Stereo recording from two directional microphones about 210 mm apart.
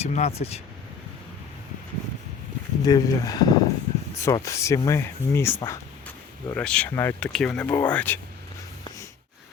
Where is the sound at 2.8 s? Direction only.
20° left (ahead or behind).